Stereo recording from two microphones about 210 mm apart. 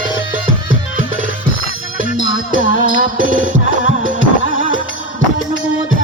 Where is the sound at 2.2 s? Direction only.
65° left (ahead or behind).